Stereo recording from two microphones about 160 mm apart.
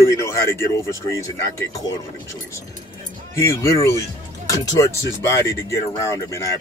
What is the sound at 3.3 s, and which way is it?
Speech, 20° left (ahead or behind).